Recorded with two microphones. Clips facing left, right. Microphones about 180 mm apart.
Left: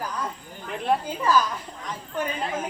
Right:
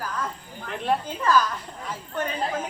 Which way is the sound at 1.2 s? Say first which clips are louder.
Right 1 dB; 10° left (ahead or behind).